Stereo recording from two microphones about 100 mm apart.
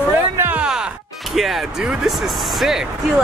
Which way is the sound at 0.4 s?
20° right (ahead or behind).